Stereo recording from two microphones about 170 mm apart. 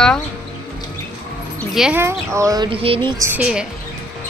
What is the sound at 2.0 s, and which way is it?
Speech, 20° right (ahead or behind).